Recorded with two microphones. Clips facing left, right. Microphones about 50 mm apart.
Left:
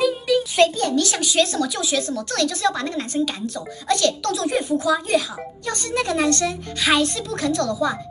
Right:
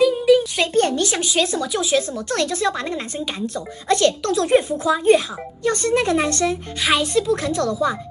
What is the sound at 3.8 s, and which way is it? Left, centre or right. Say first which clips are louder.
A child's voice: right 3 dB; right.